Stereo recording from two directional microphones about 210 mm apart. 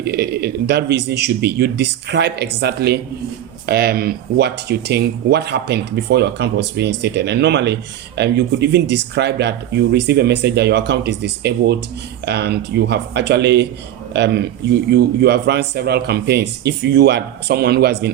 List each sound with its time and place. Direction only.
0.0 s speech: 50° right (ahead or behind)